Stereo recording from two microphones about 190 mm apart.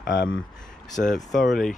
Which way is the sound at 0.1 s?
70° left (ahead or behind).